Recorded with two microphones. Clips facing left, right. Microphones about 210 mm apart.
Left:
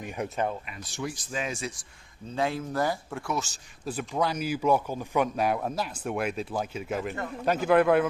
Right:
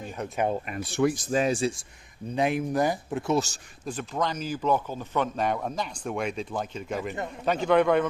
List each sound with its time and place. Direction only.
0.2 s speech: 10° left (ahead or behind)
0.5 s speech: 50° right (ahead or behind); by 1.8 s 30° right (ahead or behind)
2.2 s speech: 15° right (ahead or behind)
3.3 s speech: 40° right (ahead or behind)
3.8 s a man's voice: 10° left (ahead or behind)